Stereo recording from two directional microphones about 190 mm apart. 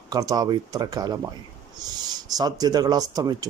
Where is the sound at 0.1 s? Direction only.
20° right (ahead or behind).